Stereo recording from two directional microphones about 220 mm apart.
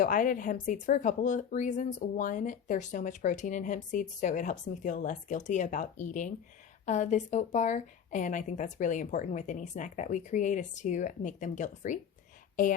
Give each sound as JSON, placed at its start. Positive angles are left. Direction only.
{"t": 0.0, "sound": "speech", "side_deg": 35}